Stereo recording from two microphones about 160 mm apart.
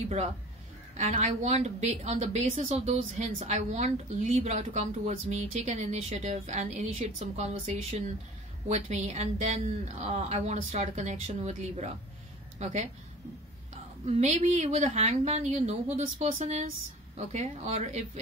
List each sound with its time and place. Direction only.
0.9 s speech: 45° right (ahead or behind)
14.0 s speech: 45° right (ahead or behind)